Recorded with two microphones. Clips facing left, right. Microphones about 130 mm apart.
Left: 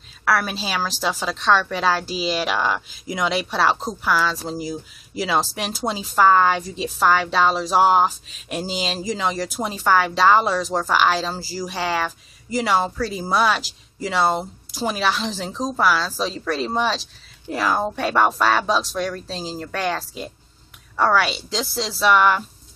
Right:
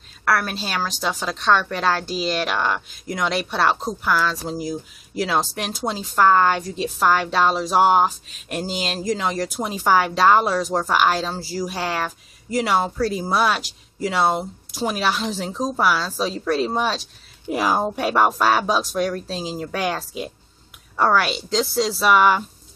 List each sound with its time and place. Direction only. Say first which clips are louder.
0.2 s a woman's voice: even; centre (ahead or behind)
17.5 s a woman's voice: right 1 dB; 15° right (ahead or behind)
17.8 s a woman's voice: right 1 dB; 5° right (ahead or behind)